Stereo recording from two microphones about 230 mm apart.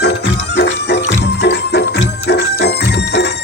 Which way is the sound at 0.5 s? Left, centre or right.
Left.